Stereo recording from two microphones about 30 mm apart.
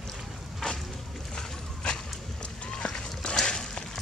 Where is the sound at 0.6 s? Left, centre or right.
Left.